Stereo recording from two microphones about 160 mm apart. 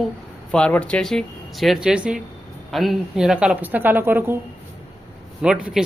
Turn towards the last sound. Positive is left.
turn(degrees=-5)  # may be behind; listen again after turning